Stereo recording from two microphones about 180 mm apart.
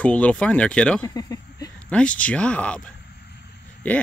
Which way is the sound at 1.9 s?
5° left (ahead or behind).